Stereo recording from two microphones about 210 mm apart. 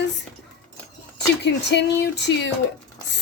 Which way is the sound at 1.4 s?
55° left (ahead or behind).